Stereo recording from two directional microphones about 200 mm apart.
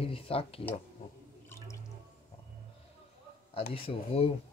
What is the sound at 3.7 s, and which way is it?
Speech, 25° left (ahead or behind).